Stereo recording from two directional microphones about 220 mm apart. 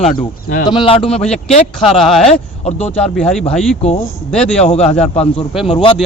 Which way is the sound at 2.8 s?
5° left (ahead or behind).